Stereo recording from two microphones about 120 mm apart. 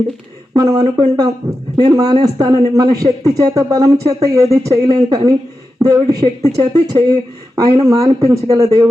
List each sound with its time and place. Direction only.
0.5 s speech: 30° right (ahead or behind)